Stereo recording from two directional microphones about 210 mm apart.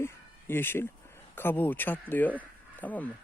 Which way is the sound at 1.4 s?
10° left (ahead or behind).